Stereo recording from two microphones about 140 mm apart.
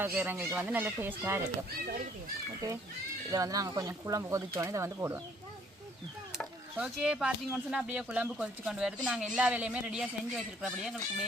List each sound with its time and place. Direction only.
0.1 s speech: 15° right (ahead or behind)
2.6 s speech: 25° right (ahead or behind)
6.3 s speech: 5° right (ahead or behind)